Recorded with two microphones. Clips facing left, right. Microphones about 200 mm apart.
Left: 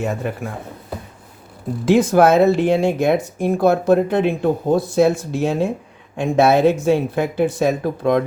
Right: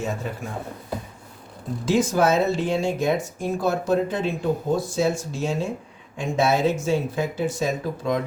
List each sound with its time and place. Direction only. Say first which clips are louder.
0.0 s speech: left 5 dB; 60° left (ahead or behind)
1.8 s speech: left 7 dB; 60° left (ahead or behind)